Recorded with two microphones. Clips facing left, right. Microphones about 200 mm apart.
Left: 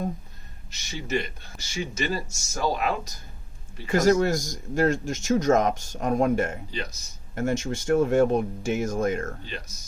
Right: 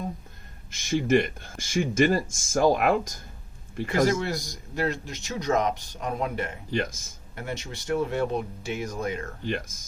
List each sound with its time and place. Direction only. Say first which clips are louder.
0.7 s speech: right 7 dB; 50° right (ahead or behind)
3.9 s a man's voice: left 4 dB; 45° left (ahead or behind)
6.7 s speech: right 6 dB; 50° right (ahead or behind)
7.3 s a man's voice: left 9 dB; 45° left (ahead or behind)
9.5 s speech: right 8 dB; 50° right (ahead or behind)